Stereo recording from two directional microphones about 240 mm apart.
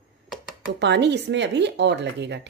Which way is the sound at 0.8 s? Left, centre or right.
Right.